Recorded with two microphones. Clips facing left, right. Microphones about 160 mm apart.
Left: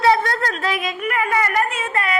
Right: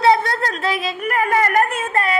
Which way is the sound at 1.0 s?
40° right (ahead or behind).